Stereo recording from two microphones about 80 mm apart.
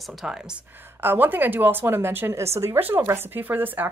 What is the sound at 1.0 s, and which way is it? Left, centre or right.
A woman's voice, right.